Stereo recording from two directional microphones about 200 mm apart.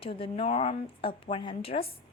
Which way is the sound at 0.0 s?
25° left (ahead or behind).